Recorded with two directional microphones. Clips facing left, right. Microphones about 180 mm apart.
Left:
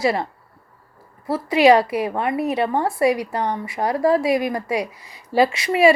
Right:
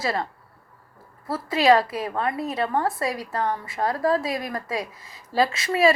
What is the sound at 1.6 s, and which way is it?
Speech, 25° left (ahead or behind).